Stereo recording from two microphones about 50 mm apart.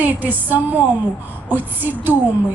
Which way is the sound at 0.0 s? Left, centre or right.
Right.